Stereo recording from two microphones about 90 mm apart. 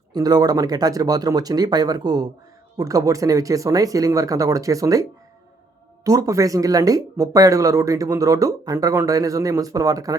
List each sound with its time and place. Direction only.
0.1 s speech: 45° right (ahead or behind)
6.1 s speech: 40° right (ahead or behind)